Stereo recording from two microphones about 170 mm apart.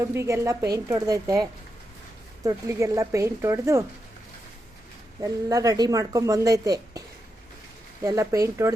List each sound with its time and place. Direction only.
0.0 s a woman's voice: 15° right (ahead or behind)
5.2 s speech: 20° right (ahead or behind)
8.0 s speech: 20° right (ahead or behind)